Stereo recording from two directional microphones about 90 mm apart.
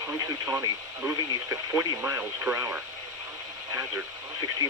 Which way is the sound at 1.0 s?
35° right (ahead or behind).